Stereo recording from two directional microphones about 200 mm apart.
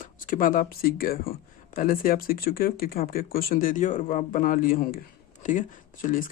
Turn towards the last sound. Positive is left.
turn(degrees=45)  # may be behind; listen again after turning